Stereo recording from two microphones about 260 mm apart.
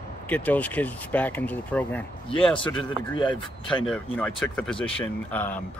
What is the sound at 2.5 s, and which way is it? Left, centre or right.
Speech, centre.